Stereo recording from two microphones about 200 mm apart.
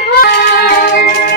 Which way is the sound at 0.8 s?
50° left (ahead or behind).